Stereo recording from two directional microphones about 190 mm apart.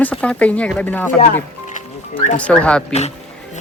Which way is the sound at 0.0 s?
5° left (ahead or behind).